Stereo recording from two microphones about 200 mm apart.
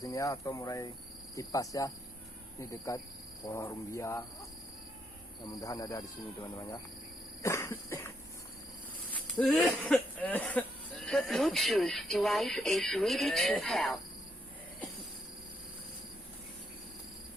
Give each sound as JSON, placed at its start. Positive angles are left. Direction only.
{"t": 0.0, "sound": "speech", "side_deg": 15}
{"t": 5.5, "sound": "speech", "side_deg": 20}
{"t": 9.1, "sound": "a sound", "side_deg": 0}
{"t": 9.6, "sound": "speech", "side_deg": 5}